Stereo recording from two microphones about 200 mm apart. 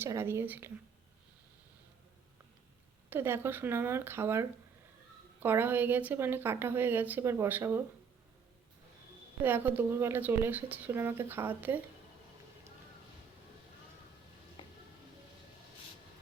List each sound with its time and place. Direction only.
0.0 s a woman's voice: 10° right (ahead or behind)
3.1 s a woman's voice: 10° right (ahead or behind)
9.4 s a woman's voice: 10° right (ahead or behind)
14.6 s music: 25° left (ahead or behind)